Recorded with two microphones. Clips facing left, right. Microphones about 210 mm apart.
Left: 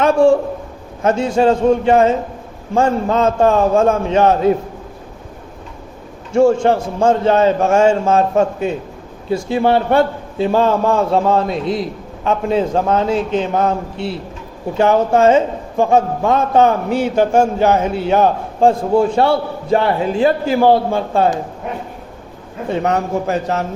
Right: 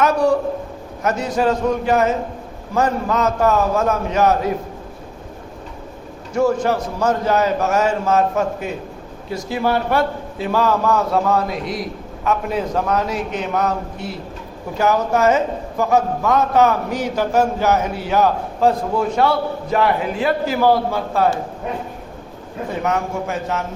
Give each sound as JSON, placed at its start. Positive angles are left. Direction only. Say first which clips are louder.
{"t": 0.0, "sound": "a man's voice", "louder": "left 5 dB", "side_deg": 25}
{"t": 6.3, "sound": "a man's voice", "louder": "left 5 dB", "side_deg": 25}
{"t": 22.7, "sound": "a man's voice", "louder": "left 5 dB", "side_deg": 35}